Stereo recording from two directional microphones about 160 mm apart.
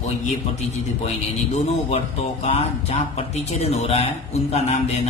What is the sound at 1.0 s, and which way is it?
A woman's voice, 45° left (ahead or behind).